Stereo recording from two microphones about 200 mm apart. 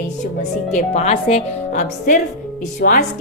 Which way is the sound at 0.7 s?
35° left (ahead or behind).